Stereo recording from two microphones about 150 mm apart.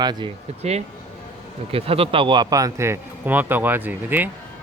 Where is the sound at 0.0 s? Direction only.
30° right (ahead or behind).